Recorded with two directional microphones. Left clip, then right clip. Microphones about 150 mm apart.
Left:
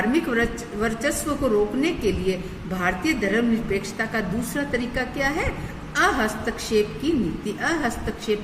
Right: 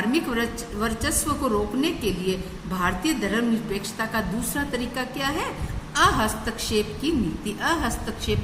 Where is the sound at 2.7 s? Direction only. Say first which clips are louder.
Left 1 dB; 25° right (ahead or behind).